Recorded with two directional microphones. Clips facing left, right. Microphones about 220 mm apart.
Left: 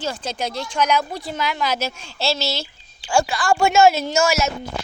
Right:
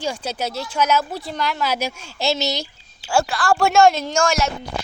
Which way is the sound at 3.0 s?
5° right (ahead or behind).